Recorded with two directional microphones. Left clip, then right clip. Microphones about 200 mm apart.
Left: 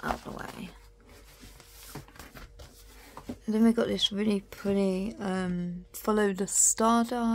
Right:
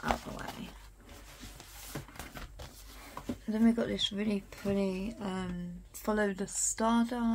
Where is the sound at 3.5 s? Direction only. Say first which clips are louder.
Left 5 dB; 50° left (ahead or behind).